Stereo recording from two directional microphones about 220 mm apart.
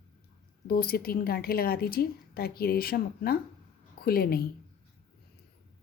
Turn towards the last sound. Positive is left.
turn(degrees=45)  # may be behind; listen again after turning